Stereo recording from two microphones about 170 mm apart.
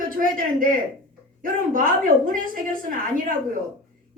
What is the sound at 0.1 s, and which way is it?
A man's voice, 55° right (ahead or behind).